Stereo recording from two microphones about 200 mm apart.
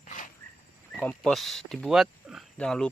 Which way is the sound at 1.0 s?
5° left (ahead or behind).